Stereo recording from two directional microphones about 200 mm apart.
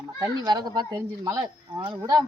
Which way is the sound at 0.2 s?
20° right (ahead or behind).